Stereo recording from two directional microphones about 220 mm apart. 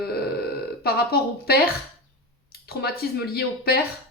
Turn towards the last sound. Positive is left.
turn(degrees=45)  # may be behind; listen again after turning